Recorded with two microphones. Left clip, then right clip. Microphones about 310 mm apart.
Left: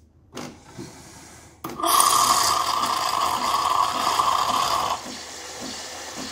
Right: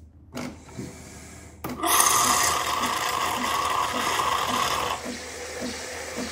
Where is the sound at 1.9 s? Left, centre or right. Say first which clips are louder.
Left 3 dB; centre.